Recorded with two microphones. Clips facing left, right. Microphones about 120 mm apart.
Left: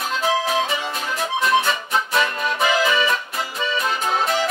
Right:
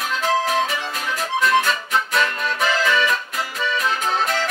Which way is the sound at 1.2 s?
25° left (ahead or behind).